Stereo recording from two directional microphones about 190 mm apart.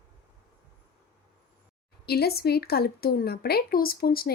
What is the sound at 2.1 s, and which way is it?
Speech, 55° left (ahead or behind).